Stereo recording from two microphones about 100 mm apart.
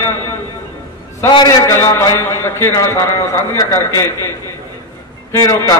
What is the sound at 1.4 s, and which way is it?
A man's voice, 30° left (ahead or behind).